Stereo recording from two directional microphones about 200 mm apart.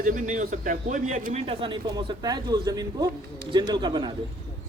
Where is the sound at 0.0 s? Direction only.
40° right (ahead or behind); by 4.1 s 25° right (ahead or behind).